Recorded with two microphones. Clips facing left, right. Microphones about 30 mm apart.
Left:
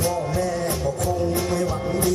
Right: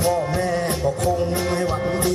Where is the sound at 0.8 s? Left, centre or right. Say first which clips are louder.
Right 3 dB; right.